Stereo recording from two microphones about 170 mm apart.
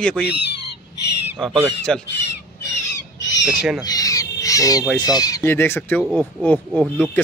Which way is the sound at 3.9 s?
20° left (ahead or behind).